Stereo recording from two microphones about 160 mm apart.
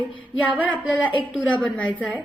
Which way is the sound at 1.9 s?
10° right (ahead or behind).